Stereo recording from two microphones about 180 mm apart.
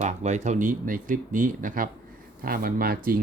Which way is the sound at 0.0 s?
40° right (ahead or behind).